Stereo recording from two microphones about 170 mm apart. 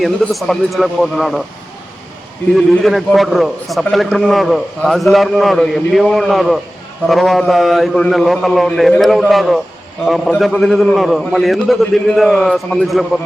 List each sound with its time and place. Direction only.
0.0 s a man's voice: centre (ahead or behind)
2.6 s a man's voice: centre (ahead or behind)